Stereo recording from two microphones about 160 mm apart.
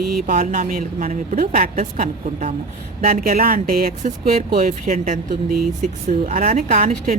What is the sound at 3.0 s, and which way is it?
Speech, 65° right (ahead or behind).